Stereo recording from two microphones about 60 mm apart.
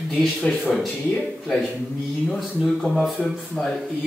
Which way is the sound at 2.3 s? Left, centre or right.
Centre.